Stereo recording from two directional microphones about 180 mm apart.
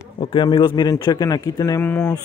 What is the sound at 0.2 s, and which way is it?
Speech, 25° left (ahead or behind).